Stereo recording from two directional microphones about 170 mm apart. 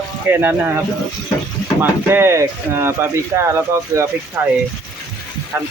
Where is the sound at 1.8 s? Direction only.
15° right (ahead or behind).